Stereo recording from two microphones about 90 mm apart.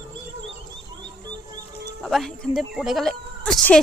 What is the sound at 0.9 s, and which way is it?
Music, 55° right (ahead or behind).